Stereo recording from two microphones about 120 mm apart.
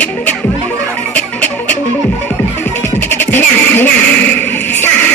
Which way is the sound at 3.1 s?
15° left (ahead or behind).